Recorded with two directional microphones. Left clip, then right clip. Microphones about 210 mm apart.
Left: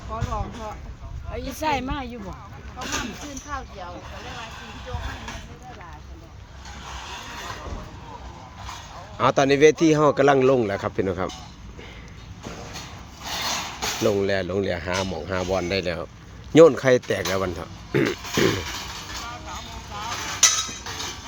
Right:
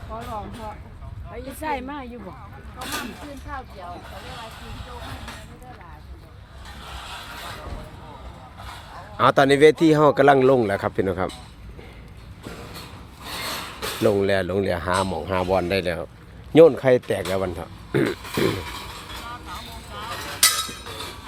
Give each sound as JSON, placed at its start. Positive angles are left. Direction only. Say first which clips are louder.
{"t": 0.1, "sound": "speech", "louder": "left 2 dB", "side_deg": 25}
{"t": 1.3, "sound": "a woman's voice", "louder": "left 3 dB", "side_deg": 55}
{"t": 2.7, "sound": "speech", "louder": "left 1 dB", "side_deg": -55}
{"t": 3.5, "sound": "a woman's voice", "louder": "left 2 dB", "side_deg": 50}
{"t": 4.1, "sound": "speech", "louder": "left 1 dB", "side_deg": -45}
{"t": 6.7, "sound": "vehicle", "louder": "left 1 dB", "side_deg": -35}
{"t": 8.6, "sound": "a man's voice", "louder": "even", "side_deg": -15}
{"t": 13.2, "sound": "rub", "louder": "left 3 dB", "side_deg": 20}
{"t": 14.1, "sound": "speech", "louder": "right 4 dB", "side_deg": -15}
{"t": 18.2, "sound": "a sound", "louder": "left 2 dB", "side_deg": 5}
{"t": 19.5, "sound": "vehicle", "louder": "left 1 dB", "side_deg": -55}
{"t": 20.1, "sound": "chink", "louder": "left 2 dB", "side_deg": 5}
{"t": 20.4, "sound": "chink", "louder": "left 1 dB", "side_deg": -50}
{"t": 20.8, "sound": "train", "louder": "left 2 dB", "side_deg": 10}